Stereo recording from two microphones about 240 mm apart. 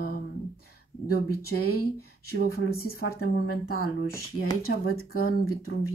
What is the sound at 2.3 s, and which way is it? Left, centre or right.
Speech, left.